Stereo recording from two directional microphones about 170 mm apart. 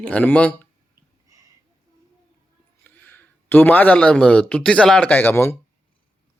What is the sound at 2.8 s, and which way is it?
A man's voice, 10° left (ahead or behind).